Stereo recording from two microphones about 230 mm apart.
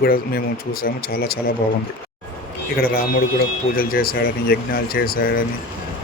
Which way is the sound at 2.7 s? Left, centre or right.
Left.